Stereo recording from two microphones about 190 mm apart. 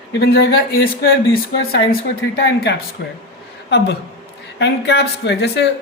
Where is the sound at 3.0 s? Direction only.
60° left (ahead or behind).